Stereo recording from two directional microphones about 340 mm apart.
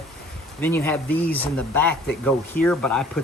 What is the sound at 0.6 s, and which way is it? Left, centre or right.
Speech, centre.